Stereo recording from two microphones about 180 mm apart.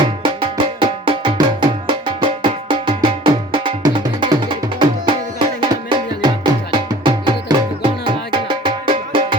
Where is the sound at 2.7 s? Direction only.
25° right (ahead or behind).